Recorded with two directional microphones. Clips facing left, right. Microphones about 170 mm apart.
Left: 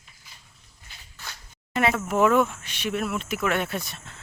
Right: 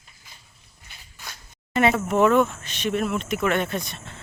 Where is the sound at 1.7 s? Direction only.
Centre (ahead or behind).